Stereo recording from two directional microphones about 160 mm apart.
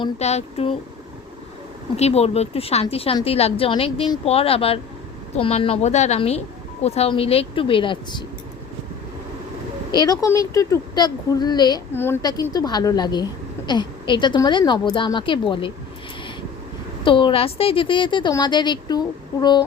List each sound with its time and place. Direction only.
0.2 s speech: 40° left (ahead or behind)
2.0 s speech: 40° left (ahead or behind)
9.9 s a woman's voice: 25° left (ahead or behind)
11.9 s a woman's voice: 15° left (ahead or behind)
12.2 s a woman's voice: 25° left (ahead or behind)
17.0 s a woman's voice: 30° left (ahead or behind)